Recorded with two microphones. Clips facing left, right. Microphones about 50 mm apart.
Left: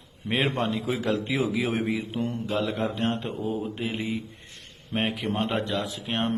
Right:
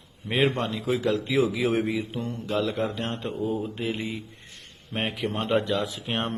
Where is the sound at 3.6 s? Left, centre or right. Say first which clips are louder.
Right 1 dB; centre.